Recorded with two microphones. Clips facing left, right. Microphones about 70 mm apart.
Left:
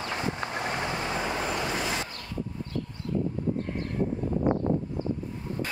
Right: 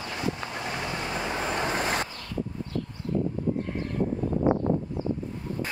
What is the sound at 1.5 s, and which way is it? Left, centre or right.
Vehicle, right.